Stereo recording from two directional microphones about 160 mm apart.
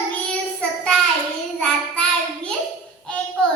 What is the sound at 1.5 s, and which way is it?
Child singing, 5° left (ahead or behind).